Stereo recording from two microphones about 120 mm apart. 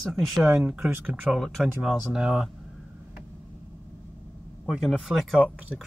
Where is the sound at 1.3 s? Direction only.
Centre (ahead or behind).